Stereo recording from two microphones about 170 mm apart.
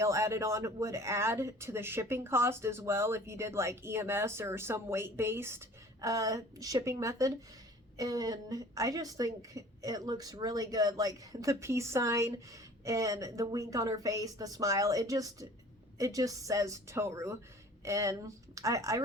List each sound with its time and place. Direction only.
0.0 s a woman's voice: 15° right (ahead or behind)